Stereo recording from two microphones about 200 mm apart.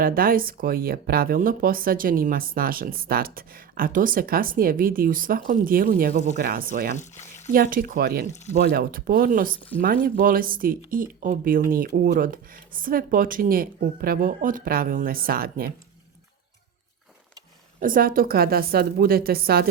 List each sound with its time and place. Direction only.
0.0 s speech: 45° right (ahead or behind)
6.9 s speech: 35° left (ahead or behind)
7.5 s speech: 45° right (ahead or behind)
8.3 s speech: 35° left (ahead or behind)
8.5 s speech: 50° right (ahead or behind)
17.7 s speech: 45° right (ahead or behind)